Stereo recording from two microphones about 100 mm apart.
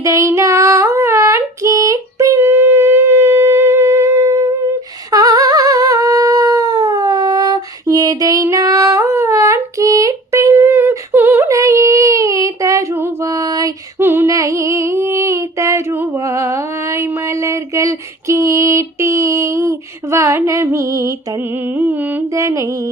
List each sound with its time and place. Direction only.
0.0 s female singing: 30° right (ahead or behind)
5.1 s humming: 35° right (ahead or behind)
14.0 s female singing: 20° right (ahead or behind)
14.3 s a sound: 30° right (ahead or behind)
21.7 s music: 20° right (ahead or behind)
22.3 s music: 30° right (ahead or behind)